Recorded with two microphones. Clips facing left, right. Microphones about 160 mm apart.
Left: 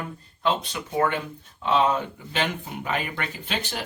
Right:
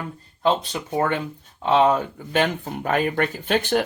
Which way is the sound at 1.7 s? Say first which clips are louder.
Right 4 dB; 45° right (ahead or behind).